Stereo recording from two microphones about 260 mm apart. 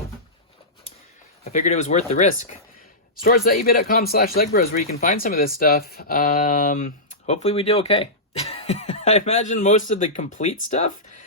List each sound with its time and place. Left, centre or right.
1.5 s speech: left